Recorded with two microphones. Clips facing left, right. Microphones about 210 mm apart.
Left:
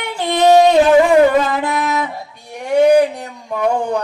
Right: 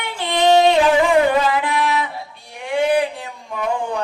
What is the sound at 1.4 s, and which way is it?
Music, 45° left (ahead or behind).